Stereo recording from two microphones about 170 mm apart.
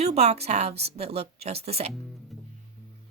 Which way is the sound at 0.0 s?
40° right (ahead or behind).